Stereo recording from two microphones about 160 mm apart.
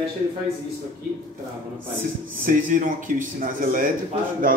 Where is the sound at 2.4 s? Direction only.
55° right (ahead or behind).